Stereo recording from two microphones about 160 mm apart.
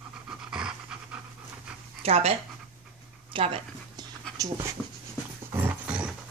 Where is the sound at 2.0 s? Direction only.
40° right (ahead or behind).